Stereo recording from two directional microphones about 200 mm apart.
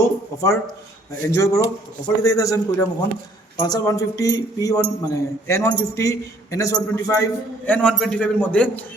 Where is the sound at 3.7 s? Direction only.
15° left (ahead or behind).